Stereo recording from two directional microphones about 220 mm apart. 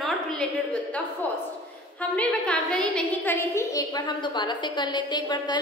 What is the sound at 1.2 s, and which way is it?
A woman's voice, 5° left (ahead or behind).